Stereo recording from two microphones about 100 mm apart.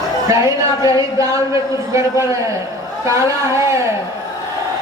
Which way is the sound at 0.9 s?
35° right (ahead or behind).